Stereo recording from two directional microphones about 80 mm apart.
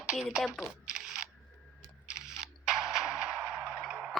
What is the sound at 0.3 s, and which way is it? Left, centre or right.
Speech, centre.